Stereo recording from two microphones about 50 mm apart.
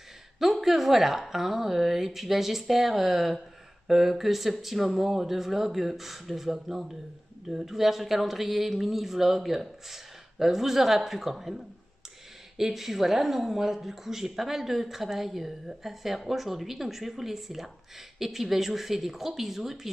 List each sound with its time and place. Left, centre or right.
0.4 s speech: centre